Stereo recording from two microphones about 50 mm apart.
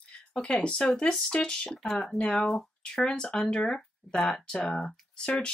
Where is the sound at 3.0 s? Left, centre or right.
Centre.